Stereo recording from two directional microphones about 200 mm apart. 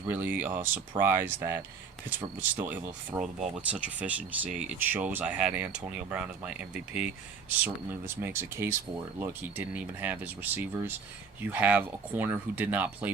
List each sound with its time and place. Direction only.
0.1 s speech: 10° right (ahead or behind)
4.4 s speech: 40° right (ahead or behind)
4.7 s speech: 10° right (ahead or behind)